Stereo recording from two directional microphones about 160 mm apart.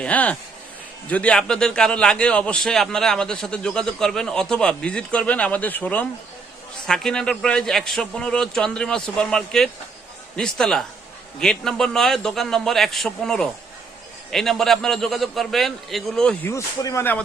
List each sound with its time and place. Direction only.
0.0 s a man's voice: 10° left (ahead or behind)
16.5 s speech: 20° left (ahead or behind)